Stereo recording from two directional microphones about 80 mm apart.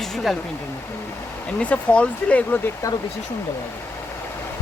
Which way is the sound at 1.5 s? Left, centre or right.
Centre.